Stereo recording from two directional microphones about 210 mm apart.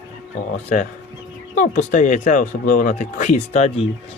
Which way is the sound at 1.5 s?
35° left (ahead or behind).